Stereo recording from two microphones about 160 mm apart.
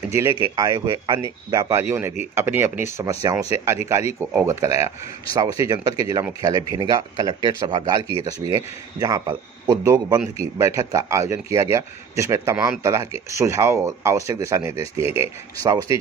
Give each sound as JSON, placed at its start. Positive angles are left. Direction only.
{"t": 0.1, "sound": "speech", "side_deg": -15}